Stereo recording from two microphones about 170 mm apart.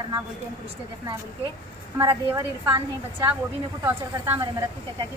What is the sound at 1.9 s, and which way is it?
A woman's voice, 15° right (ahead or behind).